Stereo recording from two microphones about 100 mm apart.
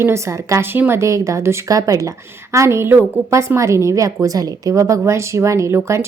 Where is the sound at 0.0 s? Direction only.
30° right (ahead or behind).